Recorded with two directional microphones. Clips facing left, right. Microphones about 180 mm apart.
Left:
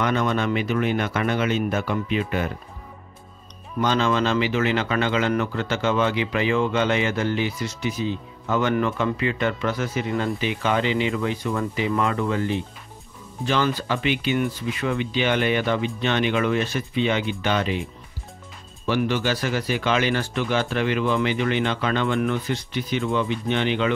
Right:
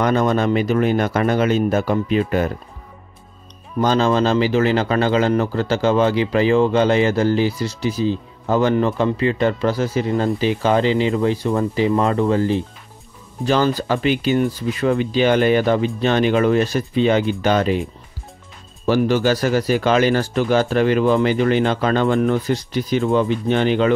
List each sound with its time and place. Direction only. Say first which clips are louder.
0.0 s speech: right 5 dB; 40° right (ahead or behind)
3.8 s speech: right 5 dB; 35° right (ahead or behind)
18.9 s speech: right 6 dB; 40° right (ahead or behind)